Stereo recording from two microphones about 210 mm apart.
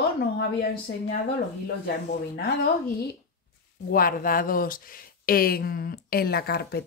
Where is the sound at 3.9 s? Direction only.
45° left (ahead or behind).